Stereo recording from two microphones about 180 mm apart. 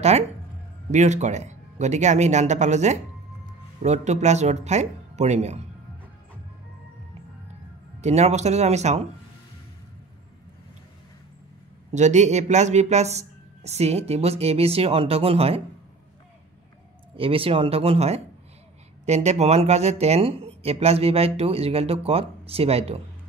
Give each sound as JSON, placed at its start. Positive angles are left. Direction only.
{"t": 0.9, "sound": "speech", "side_deg": -40}
{"t": 8.0, "sound": "speech", "side_deg": -40}
{"t": 11.9, "sound": "speech", "side_deg": -40}
{"t": 17.2, "sound": "speech", "side_deg": -30}